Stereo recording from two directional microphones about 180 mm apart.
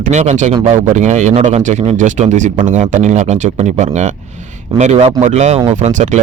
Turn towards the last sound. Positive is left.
turn(degrees=-40)  # may be behind; listen again after turning